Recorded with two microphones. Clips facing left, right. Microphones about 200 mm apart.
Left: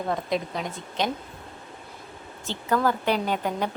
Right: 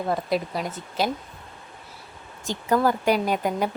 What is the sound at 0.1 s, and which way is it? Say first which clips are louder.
A woman's voice: right 2 dB; 5° right (ahead or behind).